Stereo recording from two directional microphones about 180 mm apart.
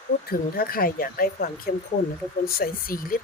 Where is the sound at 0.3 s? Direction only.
55° left (ahead or behind).